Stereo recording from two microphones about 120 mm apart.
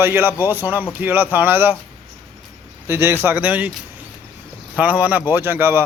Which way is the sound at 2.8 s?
20° right (ahead or behind).